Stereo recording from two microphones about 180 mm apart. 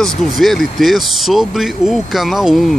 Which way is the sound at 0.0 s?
Centre (ahead or behind).